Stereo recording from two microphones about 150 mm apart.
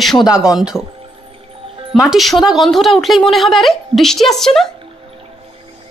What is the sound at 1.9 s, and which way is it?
Speech, centre (ahead or behind).